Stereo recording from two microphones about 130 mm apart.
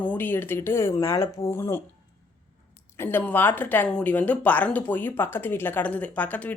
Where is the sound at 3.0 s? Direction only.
15° left (ahead or behind).